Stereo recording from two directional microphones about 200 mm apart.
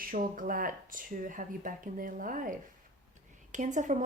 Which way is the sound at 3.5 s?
35° right (ahead or behind).